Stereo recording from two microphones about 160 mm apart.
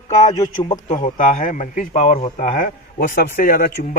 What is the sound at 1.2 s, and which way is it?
Speech, 55° left (ahead or behind).